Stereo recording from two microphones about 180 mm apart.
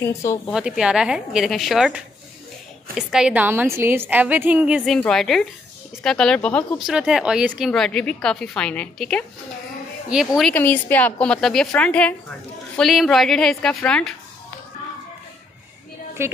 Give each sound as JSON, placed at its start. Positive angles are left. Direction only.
{"t": 0.0, "sound": "a woman's voice", "side_deg": 15}
{"t": 0.5, "sound": "a woman's voice", "side_deg": -5}
{"t": 10.5, "sound": "a woman's voice", "side_deg": 10}
{"t": 16.2, "sound": "a woman's voice", "side_deg": -15}